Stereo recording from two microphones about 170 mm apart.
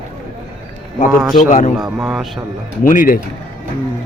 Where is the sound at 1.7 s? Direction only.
5° right (ahead or behind).